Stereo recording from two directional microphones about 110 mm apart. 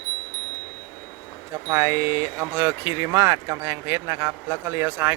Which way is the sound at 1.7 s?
30° right (ahead or behind).